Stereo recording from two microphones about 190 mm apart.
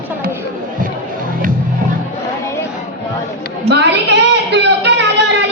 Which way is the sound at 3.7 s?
60° right (ahead or behind).